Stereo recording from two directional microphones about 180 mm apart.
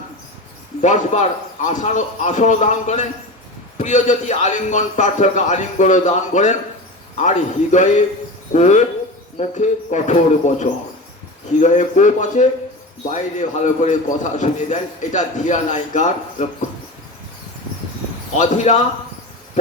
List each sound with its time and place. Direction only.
0.8 s a man's voice: 40° left (ahead or behind)
18.3 s a man's voice: 40° left (ahead or behind)